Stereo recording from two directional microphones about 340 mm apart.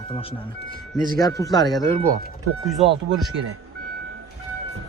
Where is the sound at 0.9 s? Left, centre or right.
Right.